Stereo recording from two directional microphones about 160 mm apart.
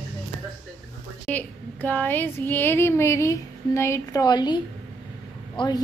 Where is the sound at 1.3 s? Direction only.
10° left (ahead or behind); by 4.5 s 25° left (ahead or behind).